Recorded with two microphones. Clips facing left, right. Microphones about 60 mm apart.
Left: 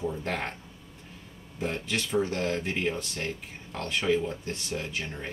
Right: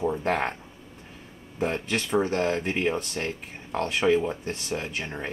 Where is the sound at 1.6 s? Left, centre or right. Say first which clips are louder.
Right 4 dB; right.